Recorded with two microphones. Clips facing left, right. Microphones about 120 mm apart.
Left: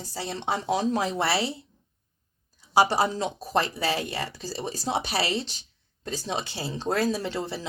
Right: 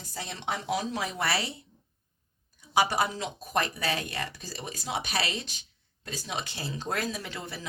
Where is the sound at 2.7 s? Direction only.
30° left (ahead or behind).